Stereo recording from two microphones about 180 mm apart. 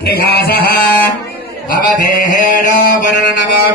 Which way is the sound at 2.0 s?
45° left (ahead or behind).